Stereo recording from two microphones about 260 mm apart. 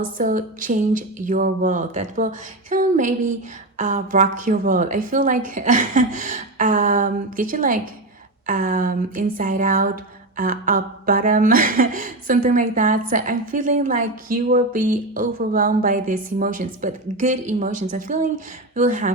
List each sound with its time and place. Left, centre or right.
0.2 s a woman's voice: right
8.4 s a sound: right
18.7 s a woman's voice: right